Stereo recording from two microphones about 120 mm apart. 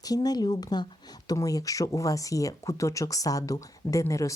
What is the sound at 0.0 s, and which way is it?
Speech, 30° left (ahead or behind).